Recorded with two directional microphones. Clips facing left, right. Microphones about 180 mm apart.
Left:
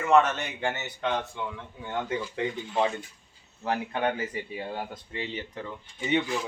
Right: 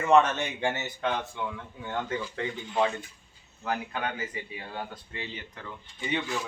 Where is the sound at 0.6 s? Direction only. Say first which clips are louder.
Left 1 dB; 10° right (ahead or behind).